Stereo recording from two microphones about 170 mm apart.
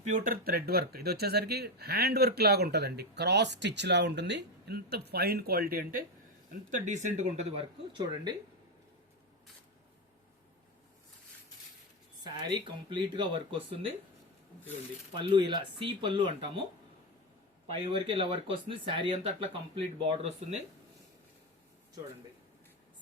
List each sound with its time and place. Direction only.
0.0 s speech: 45° right (ahead or behind)
6.7 s speech: 45° right (ahead or behind)
7.9 s speech: 25° right (ahead or behind)
12.2 s speech: 25° right (ahead or behind)
15.1 s speech: 30° right (ahead or behind)
18.0 s speech: 30° right (ahead or behind)